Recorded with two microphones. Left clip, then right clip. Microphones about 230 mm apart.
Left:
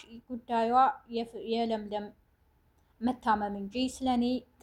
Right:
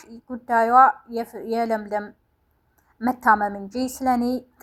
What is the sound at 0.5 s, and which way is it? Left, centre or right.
A woman's voice, right.